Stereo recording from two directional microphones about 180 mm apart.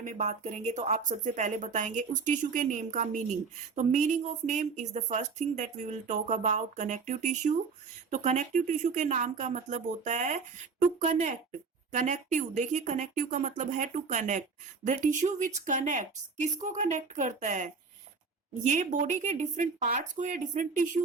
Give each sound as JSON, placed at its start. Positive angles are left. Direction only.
{"t": 0.0, "sound": "speech", "side_deg": -40}